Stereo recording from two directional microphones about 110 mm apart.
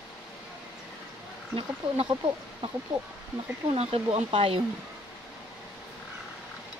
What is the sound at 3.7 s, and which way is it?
Speech, 70° right (ahead or behind).